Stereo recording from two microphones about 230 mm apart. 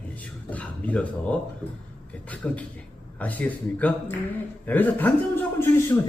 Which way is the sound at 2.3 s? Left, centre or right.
Centre.